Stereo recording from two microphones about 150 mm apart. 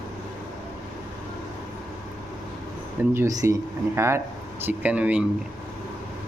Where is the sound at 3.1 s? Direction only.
20° right (ahead or behind).